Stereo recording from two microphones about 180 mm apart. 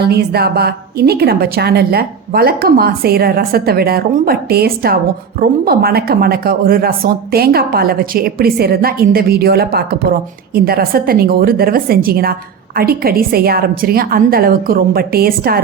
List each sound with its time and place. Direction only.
0.0 s speech: 60° right (ahead or behind)